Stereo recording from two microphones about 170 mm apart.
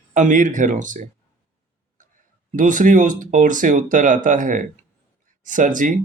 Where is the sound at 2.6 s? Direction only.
50° right (ahead or behind).